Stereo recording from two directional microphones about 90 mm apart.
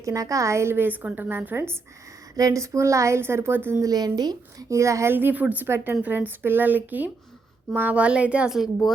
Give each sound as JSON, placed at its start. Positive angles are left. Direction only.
{"t": 0.0, "sound": "a woman's voice", "side_deg": -35}
{"t": 2.3, "sound": "a woman's voice", "side_deg": -40}
{"t": 3.8, "sound": "speech", "side_deg": -45}
{"t": 4.7, "sound": "a woman's voice", "side_deg": -35}
{"t": 5.1, "sound": "a woman's voice", "side_deg": -20}